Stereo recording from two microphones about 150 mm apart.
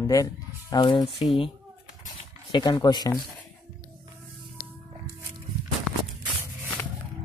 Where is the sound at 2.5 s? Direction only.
25° left (ahead or behind).